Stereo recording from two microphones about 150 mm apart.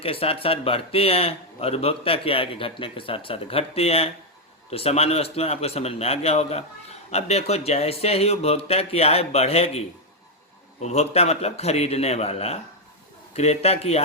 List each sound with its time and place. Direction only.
0.0 s a man's voice: 40° left (ahead or behind)